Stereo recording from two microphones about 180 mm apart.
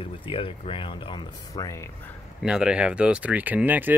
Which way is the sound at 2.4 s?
5° right (ahead or behind).